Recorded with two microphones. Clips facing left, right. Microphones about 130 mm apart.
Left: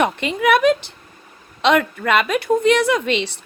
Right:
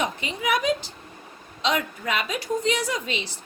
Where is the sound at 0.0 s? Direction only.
65° left (ahead or behind).